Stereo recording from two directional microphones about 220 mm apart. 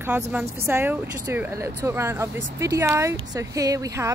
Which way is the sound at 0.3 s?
10° right (ahead or behind).